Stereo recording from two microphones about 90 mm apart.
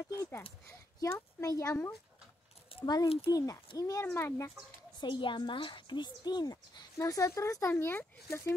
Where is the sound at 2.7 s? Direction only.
90° left.